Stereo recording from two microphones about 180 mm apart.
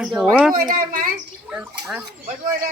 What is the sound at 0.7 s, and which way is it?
Speech, 50° right (ahead or behind).